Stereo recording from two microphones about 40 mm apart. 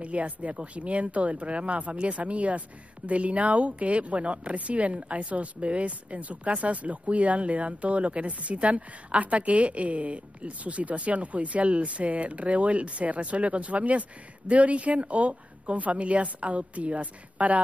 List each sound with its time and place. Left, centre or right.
0.0 s speech: right